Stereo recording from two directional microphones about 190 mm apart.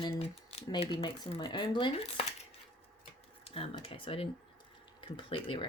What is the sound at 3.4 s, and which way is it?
Speech, 30° left (ahead or behind).